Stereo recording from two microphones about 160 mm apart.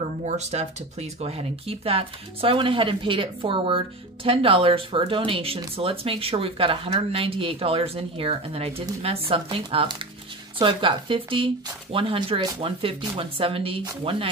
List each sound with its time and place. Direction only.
0.2 s speech: 45° right (ahead or behind)